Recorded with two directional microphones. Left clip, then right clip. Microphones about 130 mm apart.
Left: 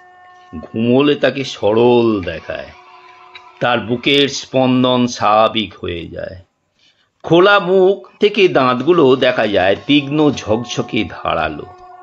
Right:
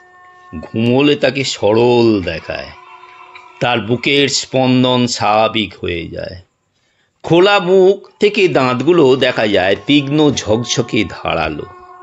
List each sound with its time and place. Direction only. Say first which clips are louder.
0.5 s speech: even; 35° right (ahead or behind)